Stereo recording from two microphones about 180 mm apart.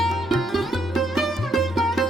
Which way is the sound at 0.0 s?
Centre (ahead or behind).